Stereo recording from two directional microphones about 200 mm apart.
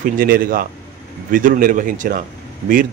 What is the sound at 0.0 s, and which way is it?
A man's voice, 45° right (ahead or behind).